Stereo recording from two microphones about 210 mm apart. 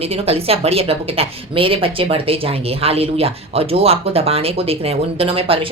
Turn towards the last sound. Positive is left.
turn(degrees=-25)  # may be behind; listen again after turning